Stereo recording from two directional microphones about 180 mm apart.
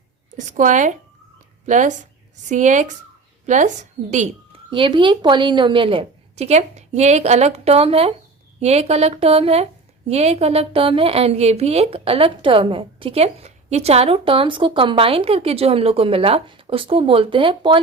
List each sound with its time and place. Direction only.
0.3 s a woman's voice: 45° right (ahead or behind)
4.7 s a woman's voice: 30° right (ahead or behind)